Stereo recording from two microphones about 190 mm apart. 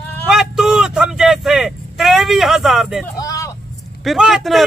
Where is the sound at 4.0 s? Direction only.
Centre (ahead or behind).